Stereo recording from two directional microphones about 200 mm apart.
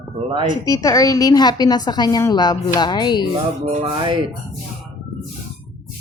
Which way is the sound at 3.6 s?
25° right (ahead or behind).